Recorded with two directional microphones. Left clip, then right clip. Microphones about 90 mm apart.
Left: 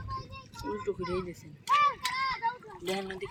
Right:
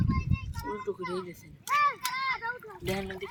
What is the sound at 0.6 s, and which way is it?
Speech, 15° left (ahead or behind).